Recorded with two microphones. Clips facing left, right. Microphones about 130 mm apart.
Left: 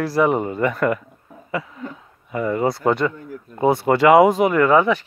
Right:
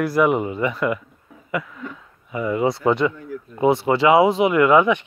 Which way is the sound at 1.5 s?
35° left (ahead or behind).